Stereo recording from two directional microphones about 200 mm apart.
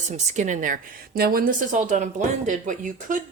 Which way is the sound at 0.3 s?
40° right (ahead or behind).